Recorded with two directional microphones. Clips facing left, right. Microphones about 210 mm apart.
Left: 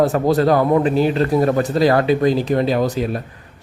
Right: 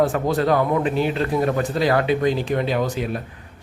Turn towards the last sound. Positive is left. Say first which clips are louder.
# left 4 dB
turn(degrees=40)  # may be behind; listen again after turning